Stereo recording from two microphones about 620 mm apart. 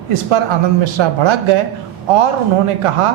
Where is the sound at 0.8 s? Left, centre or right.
Right.